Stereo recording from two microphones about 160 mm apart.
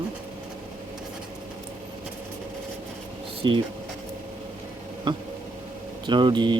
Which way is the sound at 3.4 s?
30° right (ahead or behind).